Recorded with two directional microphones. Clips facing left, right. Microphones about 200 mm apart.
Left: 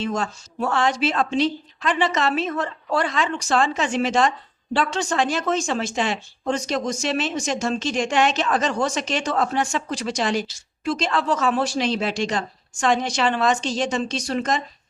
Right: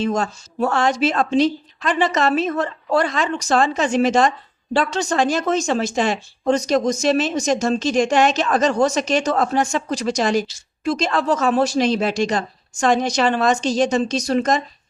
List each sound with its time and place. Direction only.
0.0 s speech: 40° right (ahead or behind)